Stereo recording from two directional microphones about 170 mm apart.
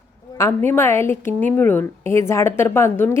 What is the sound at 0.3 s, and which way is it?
Speech, 15° left (ahead or behind).